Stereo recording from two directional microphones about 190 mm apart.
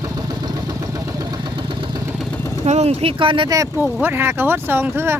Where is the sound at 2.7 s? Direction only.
35° right (ahead or behind).